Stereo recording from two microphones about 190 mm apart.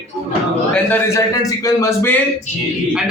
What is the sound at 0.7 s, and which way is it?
A man's voice, 10° left (ahead or behind).